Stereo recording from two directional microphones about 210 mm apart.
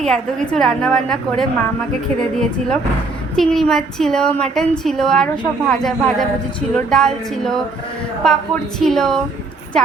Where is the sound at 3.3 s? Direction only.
Centre (ahead or behind).